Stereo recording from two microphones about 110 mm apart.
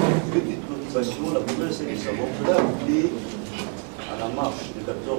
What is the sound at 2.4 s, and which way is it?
Speech, 20° right (ahead or behind).